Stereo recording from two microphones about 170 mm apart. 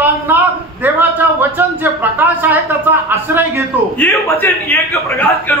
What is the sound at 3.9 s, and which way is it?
A man's voice, 10° left (ahead or behind).